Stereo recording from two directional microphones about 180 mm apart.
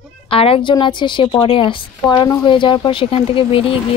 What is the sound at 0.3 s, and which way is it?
Speech, 30° left (ahead or behind).